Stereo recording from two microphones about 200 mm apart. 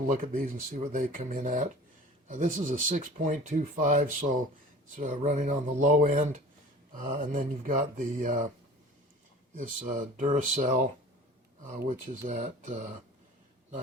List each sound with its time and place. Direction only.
0.1 s speech: 40° right (ahead or behind)
9.6 s speech: 40° right (ahead or behind)